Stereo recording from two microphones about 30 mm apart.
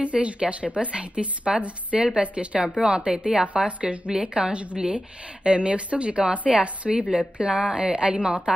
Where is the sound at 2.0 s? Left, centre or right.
Right.